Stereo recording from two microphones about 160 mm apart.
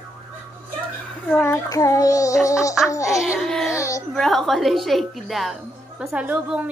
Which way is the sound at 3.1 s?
Centre (ahead or behind).